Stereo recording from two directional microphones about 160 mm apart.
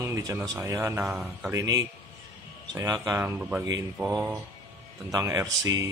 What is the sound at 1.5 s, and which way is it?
Speech, 20° right (ahead or behind).